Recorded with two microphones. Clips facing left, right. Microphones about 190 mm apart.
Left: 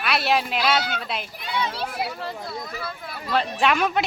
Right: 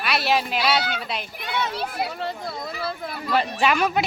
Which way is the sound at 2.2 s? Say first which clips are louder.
Right 2 dB; 30° right (ahead or behind).